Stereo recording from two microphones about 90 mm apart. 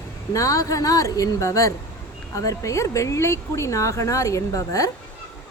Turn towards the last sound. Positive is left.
turn(degrees=40)  # may be behind; listen again after turning